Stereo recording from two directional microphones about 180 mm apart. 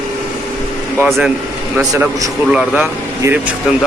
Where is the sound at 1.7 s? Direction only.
15° right (ahead or behind).